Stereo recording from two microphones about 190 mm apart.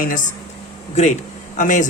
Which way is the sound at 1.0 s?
35° left (ahead or behind).